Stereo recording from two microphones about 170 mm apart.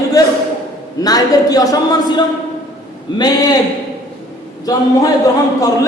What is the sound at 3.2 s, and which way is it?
Speech, 20° left (ahead or behind).